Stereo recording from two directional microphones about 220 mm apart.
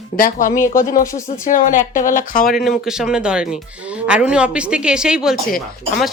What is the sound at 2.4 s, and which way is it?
Speech, centre (ahead or behind).